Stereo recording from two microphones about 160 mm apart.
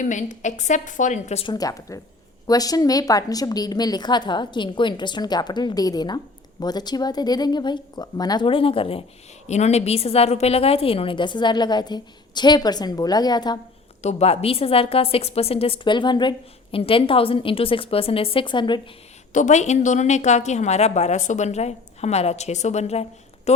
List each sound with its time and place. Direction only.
0.0 s a woman's voice: 50° left (ahead or behind)
1.5 s a woman's voice: 20° left (ahead or behind)
14.0 s a woman's voice: 40° left (ahead or behind)
19.3 s a woman's voice: 50° left (ahead or behind)